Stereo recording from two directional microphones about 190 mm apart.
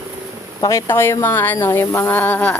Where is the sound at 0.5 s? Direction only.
15° left (ahead or behind).